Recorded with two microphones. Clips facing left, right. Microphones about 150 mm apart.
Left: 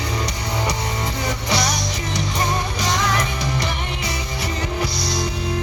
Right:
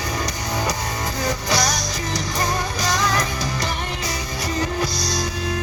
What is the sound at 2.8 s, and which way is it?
Music, 25° left (ahead or behind).